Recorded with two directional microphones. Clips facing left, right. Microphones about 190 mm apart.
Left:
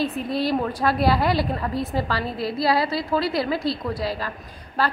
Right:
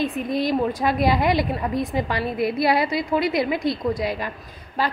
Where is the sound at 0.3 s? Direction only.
15° right (ahead or behind).